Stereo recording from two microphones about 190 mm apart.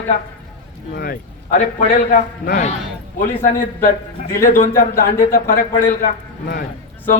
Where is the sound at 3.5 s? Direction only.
50° left (ahead or behind).